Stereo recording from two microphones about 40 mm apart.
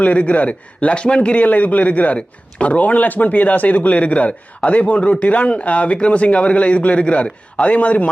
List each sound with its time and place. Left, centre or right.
0.0 s speech: left
1.5 s speech: left